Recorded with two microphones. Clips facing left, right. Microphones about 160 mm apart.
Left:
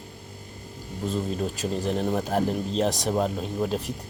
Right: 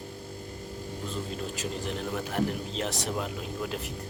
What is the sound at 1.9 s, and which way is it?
Speech, 40° left (ahead or behind).